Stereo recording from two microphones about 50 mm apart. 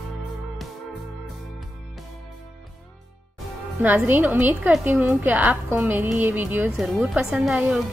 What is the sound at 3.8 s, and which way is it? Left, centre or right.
Speech, right.